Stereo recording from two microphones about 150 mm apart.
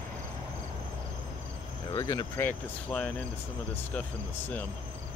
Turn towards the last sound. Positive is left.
turn(degrees=10)  # may be behind; listen again after turning